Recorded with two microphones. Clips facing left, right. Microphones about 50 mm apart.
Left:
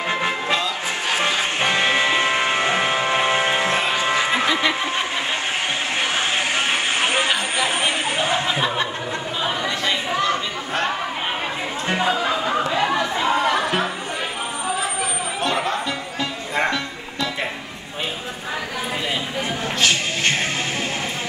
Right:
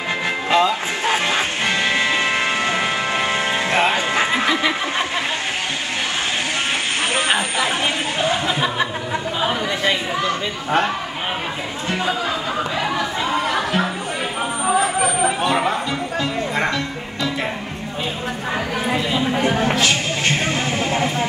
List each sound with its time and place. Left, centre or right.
0.5 s music: right
1.6 s music: left
3.7 s music: right
4.3 s a sound: centre
7.5 s chatter: centre
8.5 s chuckle: centre
12.1 s music: centre
15.4 s a sound: centre